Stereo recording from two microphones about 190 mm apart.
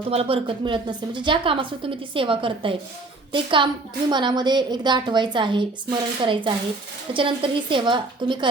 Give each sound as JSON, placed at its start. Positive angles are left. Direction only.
{"t": 0.1, "sound": "a woman's voice", "side_deg": -30}